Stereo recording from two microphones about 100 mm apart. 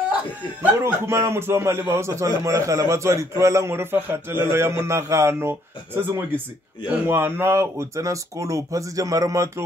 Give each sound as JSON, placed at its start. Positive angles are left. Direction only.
{"t": 0.6, "sound": "a man's voice", "side_deg": -25}